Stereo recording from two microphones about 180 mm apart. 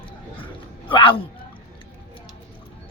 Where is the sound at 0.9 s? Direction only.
30° left (ahead or behind).